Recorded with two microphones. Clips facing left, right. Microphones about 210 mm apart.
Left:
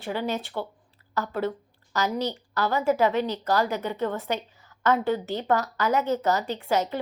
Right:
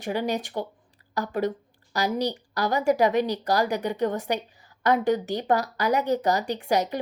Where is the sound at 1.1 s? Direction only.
15° right (ahead or behind).